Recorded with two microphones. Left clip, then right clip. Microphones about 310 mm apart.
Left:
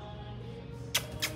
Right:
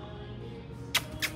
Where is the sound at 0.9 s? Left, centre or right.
Centre.